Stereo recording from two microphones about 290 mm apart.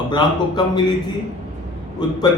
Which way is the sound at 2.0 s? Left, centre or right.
Centre.